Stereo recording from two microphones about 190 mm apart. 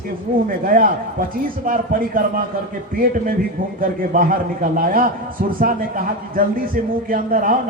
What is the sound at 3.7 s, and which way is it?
A man's voice, 45° right (ahead or behind).